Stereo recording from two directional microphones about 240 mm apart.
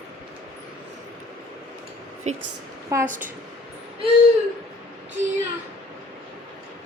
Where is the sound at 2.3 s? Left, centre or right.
Right.